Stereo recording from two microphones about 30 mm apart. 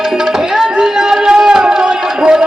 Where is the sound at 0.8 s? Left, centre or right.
Centre.